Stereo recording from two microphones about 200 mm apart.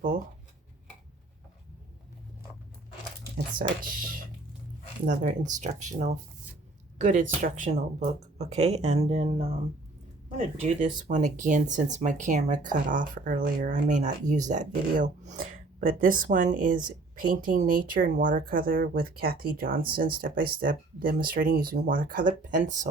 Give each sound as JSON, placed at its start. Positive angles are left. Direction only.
{"t": 3.6, "sound": "speech", "side_deg": -45}